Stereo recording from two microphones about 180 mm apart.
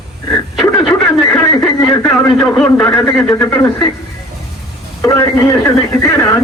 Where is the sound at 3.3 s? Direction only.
20° left (ahead or behind).